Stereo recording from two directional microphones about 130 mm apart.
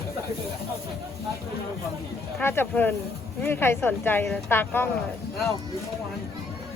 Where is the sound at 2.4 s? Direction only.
15° left (ahead or behind).